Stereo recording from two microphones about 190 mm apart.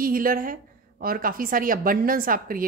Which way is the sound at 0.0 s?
50° right (ahead or behind).